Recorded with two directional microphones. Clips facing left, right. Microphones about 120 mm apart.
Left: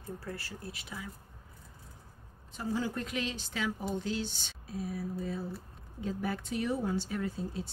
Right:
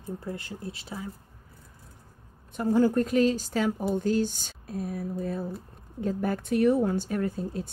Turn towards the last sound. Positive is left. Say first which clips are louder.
# right 6 dB
turn(degrees=-50)  # may be behind; listen again after turning